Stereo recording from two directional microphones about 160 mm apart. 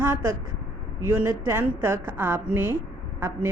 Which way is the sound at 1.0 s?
10° right (ahead or behind).